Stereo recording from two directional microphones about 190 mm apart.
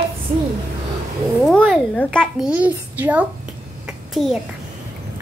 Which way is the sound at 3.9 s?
Centre (ahead or behind).